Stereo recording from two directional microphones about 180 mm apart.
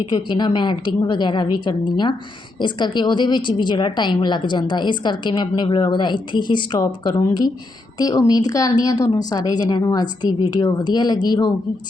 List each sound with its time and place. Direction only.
0.1 s a woman's voice: 25° left (ahead or behind)